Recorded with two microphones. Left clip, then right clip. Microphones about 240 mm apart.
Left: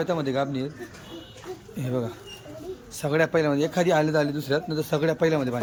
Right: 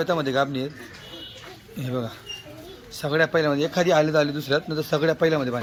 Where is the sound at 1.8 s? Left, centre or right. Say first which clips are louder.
Even; centre.